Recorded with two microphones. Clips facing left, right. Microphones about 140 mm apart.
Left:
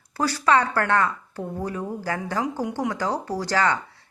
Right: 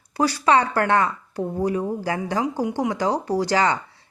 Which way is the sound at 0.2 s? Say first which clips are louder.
Right 2 dB; 15° right (ahead or behind).